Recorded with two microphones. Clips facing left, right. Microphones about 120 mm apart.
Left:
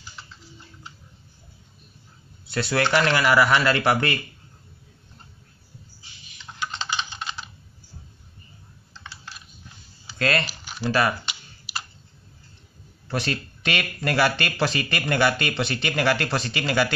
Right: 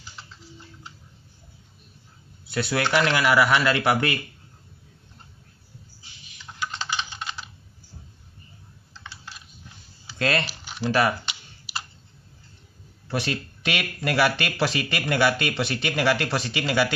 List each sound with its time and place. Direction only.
2.5 s speech: 5° right (ahead or behind)
6.9 s typing: 5° right (ahead or behind)
10.1 s typing: 20° right (ahead or behind)
10.9 s speech: 15° right (ahead or behind)
11.2 s typing: 25° right (ahead or behind)
13.1 s speech: 10° right (ahead or behind)